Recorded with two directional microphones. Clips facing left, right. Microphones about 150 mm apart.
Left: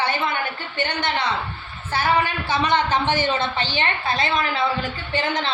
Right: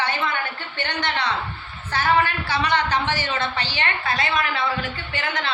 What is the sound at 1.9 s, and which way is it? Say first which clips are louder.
A woman's voice: even; 15° left (ahead or behind).